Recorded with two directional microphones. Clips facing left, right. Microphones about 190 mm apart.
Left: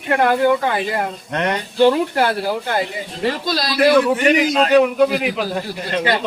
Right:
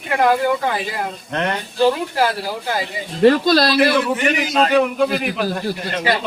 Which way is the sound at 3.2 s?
65° right (ahead or behind).